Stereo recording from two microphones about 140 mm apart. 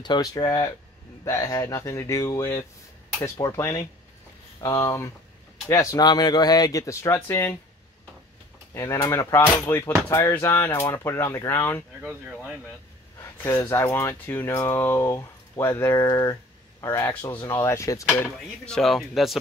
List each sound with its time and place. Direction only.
0.0 s speech: 30° left (ahead or behind)
8.7 s speech: 25° left (ahead or behind)
12.0 s speech: centre (ahead or behind)
13.2 s speech: 20° left (ahead or behind)
17.1 s speech: 10° left (ahead or behind)
18.7 s speech: centre (ahead or behind)